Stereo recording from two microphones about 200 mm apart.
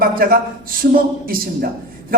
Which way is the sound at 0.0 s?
45° right (ahead or behind).